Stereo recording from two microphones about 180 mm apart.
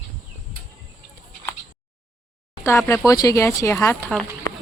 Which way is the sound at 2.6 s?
15° left (ahead or behind).